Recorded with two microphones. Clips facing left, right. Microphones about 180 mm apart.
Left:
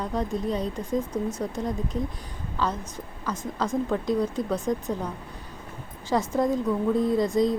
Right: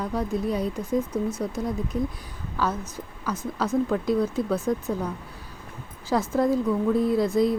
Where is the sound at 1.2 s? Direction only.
15° left (ahead or behind).